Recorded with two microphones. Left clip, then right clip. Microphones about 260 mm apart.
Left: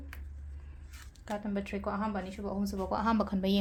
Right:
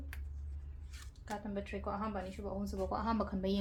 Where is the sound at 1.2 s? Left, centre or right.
Left.